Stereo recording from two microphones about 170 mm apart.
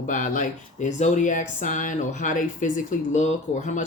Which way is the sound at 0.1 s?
50° left (ahead or behind).